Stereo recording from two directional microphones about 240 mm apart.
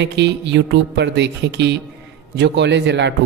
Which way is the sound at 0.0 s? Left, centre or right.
Right.